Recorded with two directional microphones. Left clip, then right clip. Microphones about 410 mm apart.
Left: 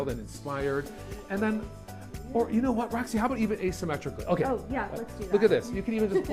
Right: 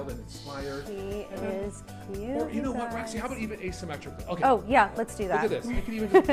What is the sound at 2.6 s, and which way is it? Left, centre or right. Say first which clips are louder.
Speech: left 2 dB; left.